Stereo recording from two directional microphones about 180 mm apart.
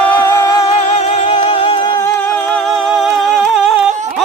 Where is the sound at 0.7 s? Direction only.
35° left (ahead or behind).